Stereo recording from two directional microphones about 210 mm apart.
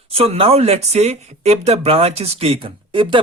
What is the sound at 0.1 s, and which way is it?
Speech, 30° right (ahead or behind).